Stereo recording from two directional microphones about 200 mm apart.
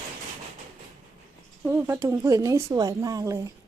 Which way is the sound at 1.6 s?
10° right (ahead or behind).